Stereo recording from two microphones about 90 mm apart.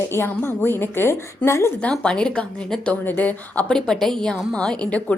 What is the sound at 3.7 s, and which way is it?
Speech, 5° left (ahead or behind).